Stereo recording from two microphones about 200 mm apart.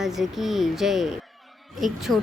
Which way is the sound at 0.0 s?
Centre (ahead or behind).